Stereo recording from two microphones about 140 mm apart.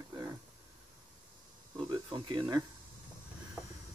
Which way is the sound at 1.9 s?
35° right (ahead or behind).